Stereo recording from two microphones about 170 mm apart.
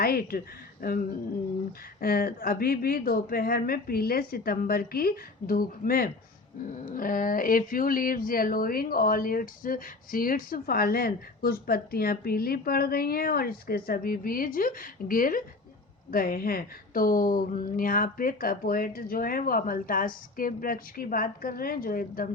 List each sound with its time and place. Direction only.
0.0 s speech: 60° left (ahead or behind)
2.0 s speech: 60° left (ahead or behind)